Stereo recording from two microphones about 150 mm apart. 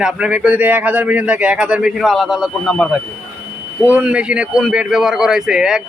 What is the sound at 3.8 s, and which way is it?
A man's voice, 10° right (ahead or behind).